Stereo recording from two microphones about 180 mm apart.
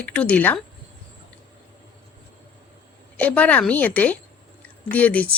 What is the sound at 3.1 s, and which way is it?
A woman's voice, 10° left (ahead or behind).